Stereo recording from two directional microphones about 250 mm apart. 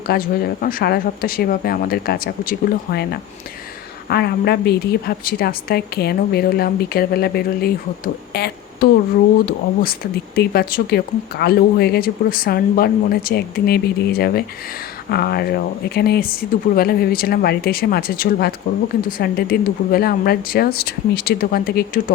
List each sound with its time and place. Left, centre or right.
0.1 s a woman's voice: left
10.3 s a woman's voice: left